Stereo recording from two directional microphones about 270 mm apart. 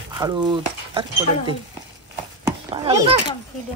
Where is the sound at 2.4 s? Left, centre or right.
Centre.